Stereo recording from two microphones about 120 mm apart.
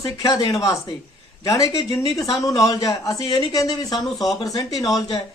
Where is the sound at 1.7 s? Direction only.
45° left (ahead or behind).